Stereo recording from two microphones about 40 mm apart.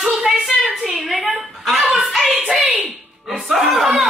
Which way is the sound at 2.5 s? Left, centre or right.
Centre.